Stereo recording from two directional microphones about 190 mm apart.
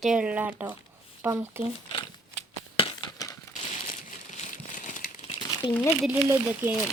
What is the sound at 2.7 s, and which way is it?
Crumpling, 25° left (ahead or behind).